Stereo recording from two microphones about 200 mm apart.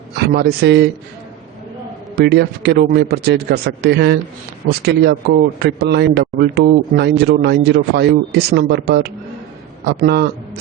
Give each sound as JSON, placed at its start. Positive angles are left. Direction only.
{"t": 0.2, "sound": "a man's voice", "side_deg": -55}
{"t": 2.1, "sound": "a man's voice", "side_deg": -55}